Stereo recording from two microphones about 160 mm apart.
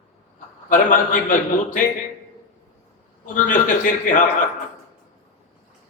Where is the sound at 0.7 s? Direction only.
55° left (ahead or behind).